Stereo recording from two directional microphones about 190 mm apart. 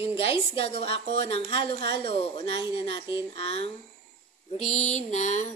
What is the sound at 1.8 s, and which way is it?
Speech, 25° left (ahead or behind).